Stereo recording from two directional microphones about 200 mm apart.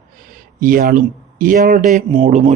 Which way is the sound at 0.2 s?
45° right (ahead or behind).